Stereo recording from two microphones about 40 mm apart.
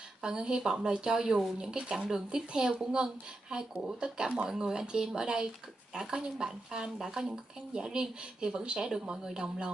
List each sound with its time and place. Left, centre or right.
0.2 s speech: right